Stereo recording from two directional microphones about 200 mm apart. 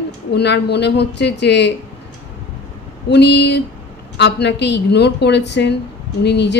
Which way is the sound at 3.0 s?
60° left (ahead or behind).